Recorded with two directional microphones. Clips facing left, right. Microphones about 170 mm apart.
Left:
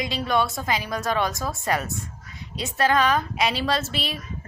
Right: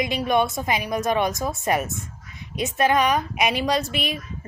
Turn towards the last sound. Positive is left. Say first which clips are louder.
# right 2 dB
turn(degrees=-15)  # may be behind; listen again after turning